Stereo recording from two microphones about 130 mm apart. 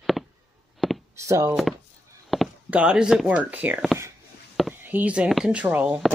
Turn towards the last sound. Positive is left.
turn(degrees=-10)  # may be behind; listen again after turning